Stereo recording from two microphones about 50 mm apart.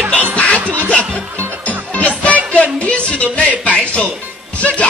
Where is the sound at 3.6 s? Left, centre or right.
Left.